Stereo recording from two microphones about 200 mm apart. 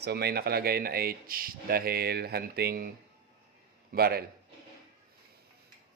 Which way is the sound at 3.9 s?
50° right (ahead or behind).